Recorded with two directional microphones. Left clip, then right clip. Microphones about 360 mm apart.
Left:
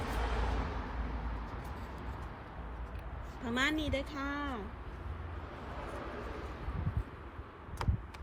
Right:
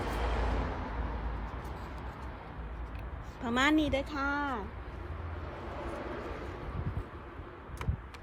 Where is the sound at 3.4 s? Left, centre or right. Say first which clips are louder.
Right 5 dB; centre.